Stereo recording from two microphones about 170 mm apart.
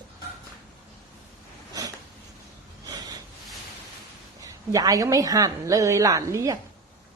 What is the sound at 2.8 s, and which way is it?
Snort, 20° right (ahead or behind).